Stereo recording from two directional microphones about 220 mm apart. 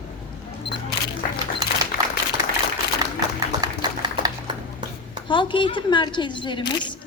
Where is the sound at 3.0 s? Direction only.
15° right (ahead or behind).